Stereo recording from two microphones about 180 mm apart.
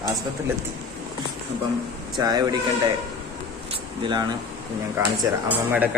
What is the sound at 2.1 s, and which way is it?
Speech, 20° right (ahead or behind).